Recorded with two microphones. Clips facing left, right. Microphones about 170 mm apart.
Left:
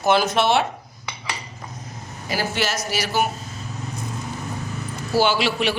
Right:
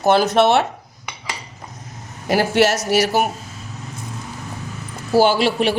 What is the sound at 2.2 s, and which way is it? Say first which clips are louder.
A woman's voice: right 9 dB; 65° right (ahead or behind).